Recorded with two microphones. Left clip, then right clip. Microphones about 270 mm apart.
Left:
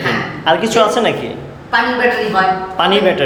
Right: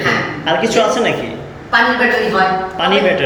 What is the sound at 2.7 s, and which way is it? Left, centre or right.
Speech, centre.